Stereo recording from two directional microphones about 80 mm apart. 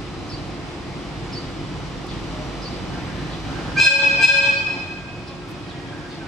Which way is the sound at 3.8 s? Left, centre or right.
Centre.